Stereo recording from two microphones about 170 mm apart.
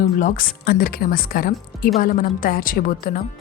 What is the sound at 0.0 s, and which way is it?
Speech, 55° left (ahead or behind).